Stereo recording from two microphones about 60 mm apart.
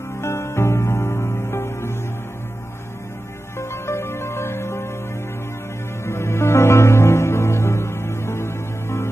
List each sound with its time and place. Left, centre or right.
0.2 s music: left
3.5 s music: left
6.0 s music: left